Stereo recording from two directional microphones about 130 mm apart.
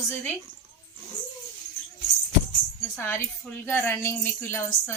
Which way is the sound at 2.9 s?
20° left (ahead or behind).